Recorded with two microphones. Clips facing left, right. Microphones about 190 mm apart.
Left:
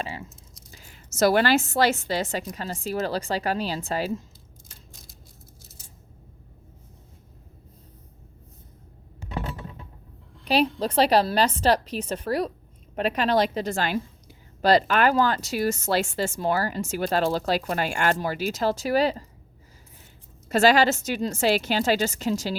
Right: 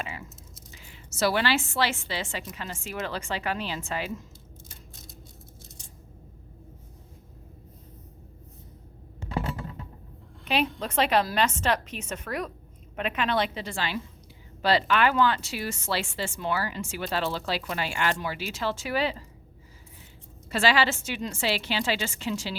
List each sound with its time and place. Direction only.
0.0 s a sound: 30° left (ahead or behind)
0.7 s a woman's voice: 45° left (ahead or behind)
10.4 s a woman's voice: 35° left (ahead or behind)
20.5 s speech: 45° left (ahead or behind)